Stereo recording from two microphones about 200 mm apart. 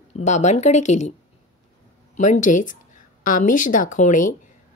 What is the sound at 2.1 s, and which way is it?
A woman's voice, 40° left (ahead or behind).